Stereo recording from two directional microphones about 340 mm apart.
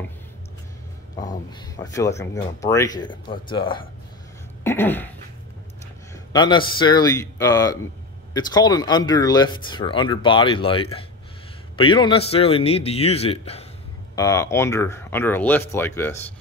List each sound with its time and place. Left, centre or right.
1.2 s speech: centre
4.6 s a sound: centre
6.3 s speech: centre